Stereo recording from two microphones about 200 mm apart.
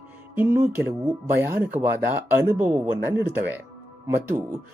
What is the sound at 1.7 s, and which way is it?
Speech, 20° right (ahead or behind).